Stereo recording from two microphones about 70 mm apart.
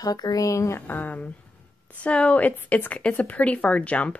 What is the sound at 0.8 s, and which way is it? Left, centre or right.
Speech, left.